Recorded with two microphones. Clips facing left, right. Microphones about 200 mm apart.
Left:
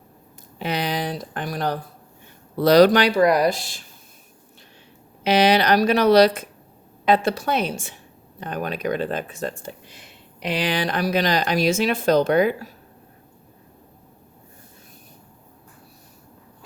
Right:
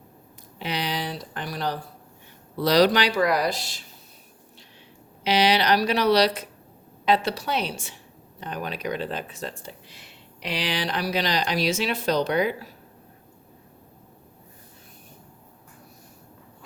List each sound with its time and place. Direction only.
0.6 s speech: 50° left (ahead or behind)
5.2 s speech: 50° left (ahead or behind)